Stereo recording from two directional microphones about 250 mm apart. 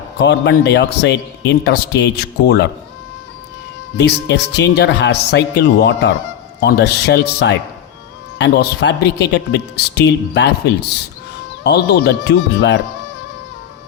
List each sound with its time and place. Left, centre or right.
0.2 s speech: left
3.9 s speech: left